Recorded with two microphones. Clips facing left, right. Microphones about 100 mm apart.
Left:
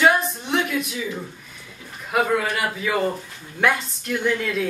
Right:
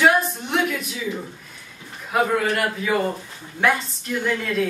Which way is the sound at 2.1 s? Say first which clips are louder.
Right 1 dB; centre (ahead or behind).